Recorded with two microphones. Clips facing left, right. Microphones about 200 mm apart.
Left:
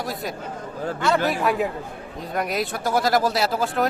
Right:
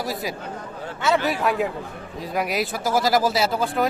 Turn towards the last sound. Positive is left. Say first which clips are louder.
# even
turn(degrees=0)  # may be behind; listen again after turning